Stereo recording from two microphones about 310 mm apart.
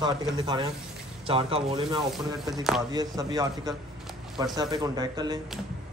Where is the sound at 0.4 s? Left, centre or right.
Centre.